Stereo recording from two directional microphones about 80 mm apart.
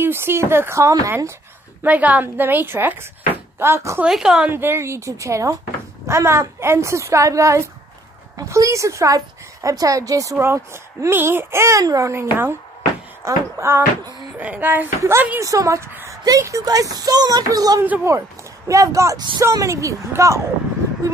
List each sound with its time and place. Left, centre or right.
0.0 s speech: right
1.8 s speech: centre; by 4.0 s right
4.0 s speech: centre
4.5 s a woman's voice: right
10.4 s speech: right
11.8 s a woman's voice: right
12.1 s speech: right
14.3 s a woman's voice: centre; by 19.1 s right
19.1 s speech: right
19.5 s speech: right